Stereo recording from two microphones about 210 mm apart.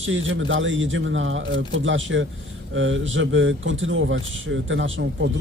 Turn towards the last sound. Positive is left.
turn(degrees=-65)  # may be behind; listen again after turning